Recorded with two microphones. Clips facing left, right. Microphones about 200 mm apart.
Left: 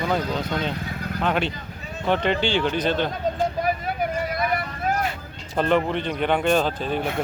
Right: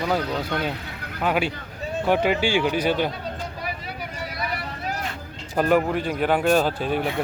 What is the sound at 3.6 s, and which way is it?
Vehicle, 50° left (ahead or behind).